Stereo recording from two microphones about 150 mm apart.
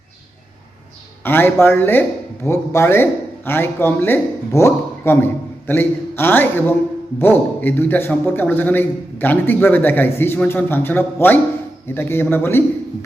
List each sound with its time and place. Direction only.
1.2 s a man's voice: 15° left (ahead or behind)